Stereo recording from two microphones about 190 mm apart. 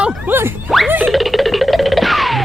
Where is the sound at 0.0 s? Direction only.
5° right (ahead or behind).